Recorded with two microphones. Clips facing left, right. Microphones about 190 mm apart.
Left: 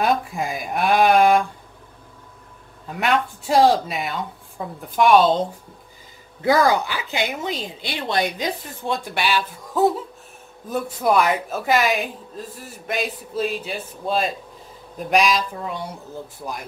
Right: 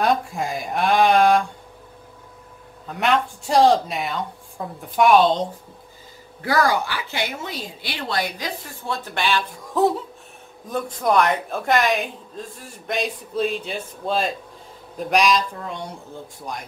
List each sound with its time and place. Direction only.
0.0 s speech: centre (ahead or behind)
2.9 s speech: centre (ahead or behind)
6.4 s a woman's voice: 20° left (ahead or behind)